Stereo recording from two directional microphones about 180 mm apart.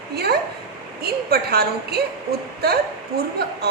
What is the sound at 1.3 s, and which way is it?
Speech, 60° right (ahead or behind).